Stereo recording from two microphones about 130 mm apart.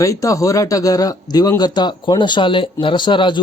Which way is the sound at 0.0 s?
25° left (ahead or behind).